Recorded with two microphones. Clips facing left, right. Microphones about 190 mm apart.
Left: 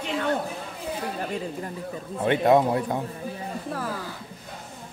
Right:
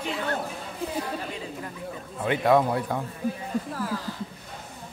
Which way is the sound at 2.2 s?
25° left (ahead or behind).